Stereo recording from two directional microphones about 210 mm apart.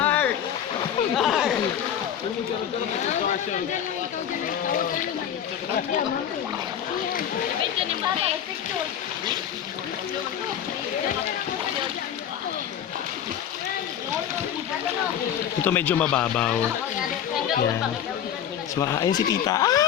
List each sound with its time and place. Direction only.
0.0 s rowboat: 10° left (ahead or behind)
1.1 s a sound: centre (ahead or behind)
15.6 s speech: 10° left (ahead or behind)
18.8 s speech: 15° left (ahead or behind)